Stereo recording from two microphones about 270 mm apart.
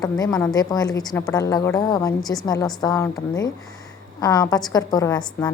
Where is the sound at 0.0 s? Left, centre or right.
Centre.